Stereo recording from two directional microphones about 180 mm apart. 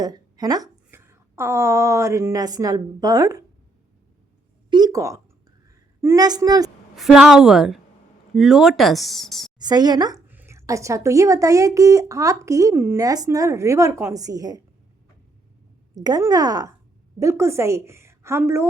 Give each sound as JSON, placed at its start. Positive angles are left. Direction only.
{"t": 0.0, "sound": "a woman's voice", "side_deg": -20}
{"t": 4.7, "sound": "a sound", "side_deg": -20}
{"t": 6.0, "sound": "speech", "side_deg": -20}
{"t": 6.9, "sound": "speech", "side_deg": 0}
{"t": 9.6, "sound": "speech", "side_deg": -25}
{"t": 10.2, "sound": "a woman's voice", "side_deg": -10}
{"t": 16.0, "sound": "a woman's voice", "side_deg": -20}